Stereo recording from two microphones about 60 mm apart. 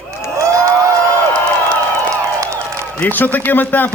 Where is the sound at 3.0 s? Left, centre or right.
Left.